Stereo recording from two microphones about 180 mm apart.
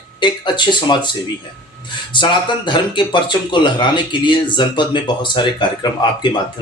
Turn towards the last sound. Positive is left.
turn(degrees=25)  # may be behind; listen again after turning